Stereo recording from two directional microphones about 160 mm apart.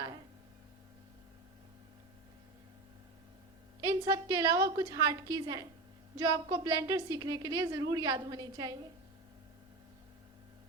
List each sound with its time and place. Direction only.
3.8 s a woman's voice: 20° right (ahead or behind)